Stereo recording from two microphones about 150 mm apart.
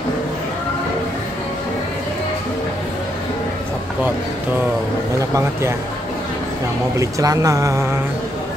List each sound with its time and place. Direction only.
5.3 s speech: 20° right (ahead or behind)
7.0 s speech: 20° right (ahead or behind)